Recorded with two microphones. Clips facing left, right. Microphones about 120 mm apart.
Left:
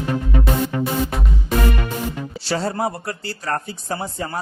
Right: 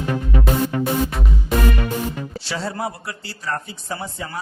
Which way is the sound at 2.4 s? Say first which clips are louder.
Left 5 dB; 45° left (ahead or behind).